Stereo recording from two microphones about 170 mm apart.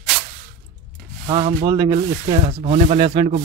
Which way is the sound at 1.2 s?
35° right (ahead or behind).